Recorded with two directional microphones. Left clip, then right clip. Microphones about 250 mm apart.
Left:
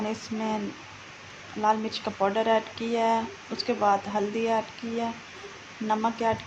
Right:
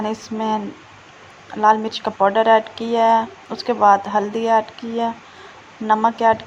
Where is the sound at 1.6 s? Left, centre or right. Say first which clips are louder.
Right 10 dB; centre.